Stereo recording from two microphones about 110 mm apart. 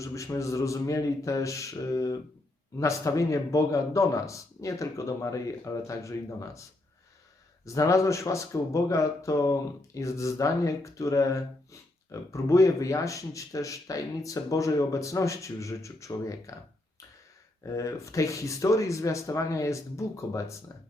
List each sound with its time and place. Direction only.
0.0 s speech: 30° left (ahead or behind)
7.6 s speech: 30° left (ahead or behind)
17.7 s speech: 30° left (ahead or behind)